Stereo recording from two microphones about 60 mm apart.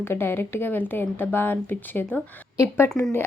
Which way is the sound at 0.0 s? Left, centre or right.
Left.